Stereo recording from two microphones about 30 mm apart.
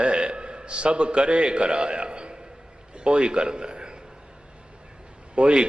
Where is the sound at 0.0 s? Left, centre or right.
Right.